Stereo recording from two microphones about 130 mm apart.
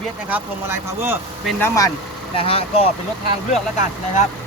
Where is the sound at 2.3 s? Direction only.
45° left (ahead or behind).